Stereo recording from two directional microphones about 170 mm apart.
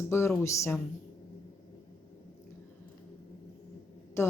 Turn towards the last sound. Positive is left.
turn(degrees=15)  # may be behind; listen again after turning